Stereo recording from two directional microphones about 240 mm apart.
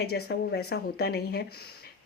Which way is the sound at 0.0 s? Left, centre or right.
Left.